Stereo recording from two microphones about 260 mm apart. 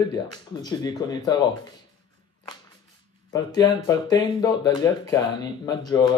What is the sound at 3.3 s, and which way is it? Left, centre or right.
Speech, centre.